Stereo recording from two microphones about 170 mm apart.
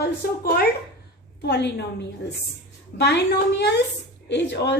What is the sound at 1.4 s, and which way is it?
A woman's voice, 80° left.